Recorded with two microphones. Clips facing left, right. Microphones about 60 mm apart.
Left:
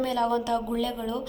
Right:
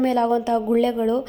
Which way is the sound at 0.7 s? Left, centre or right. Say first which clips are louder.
Right 10 dB; right.